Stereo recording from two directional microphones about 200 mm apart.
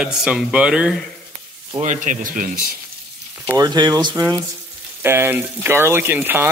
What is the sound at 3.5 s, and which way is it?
Speech, 20° right (ahead or behind).